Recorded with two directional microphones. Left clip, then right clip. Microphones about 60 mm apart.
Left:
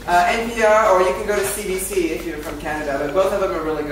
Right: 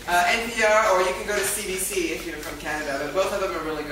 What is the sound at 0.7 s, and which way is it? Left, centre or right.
Speech, right.